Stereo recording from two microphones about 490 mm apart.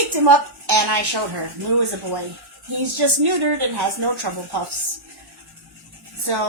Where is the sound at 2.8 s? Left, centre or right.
Right.